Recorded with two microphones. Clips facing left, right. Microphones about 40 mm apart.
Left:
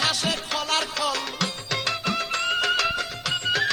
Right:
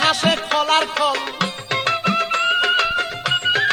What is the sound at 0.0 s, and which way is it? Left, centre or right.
Music, right.